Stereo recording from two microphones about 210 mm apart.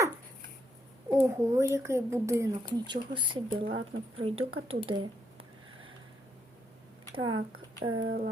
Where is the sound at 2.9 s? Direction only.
25° right (ahead or behind).